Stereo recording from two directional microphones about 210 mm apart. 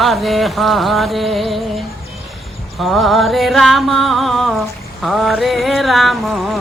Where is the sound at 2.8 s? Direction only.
Centre (ahead or behind).